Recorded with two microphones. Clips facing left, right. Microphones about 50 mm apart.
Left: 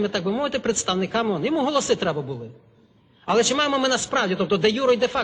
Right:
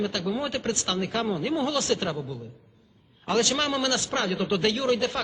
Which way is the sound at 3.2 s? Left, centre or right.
Centre.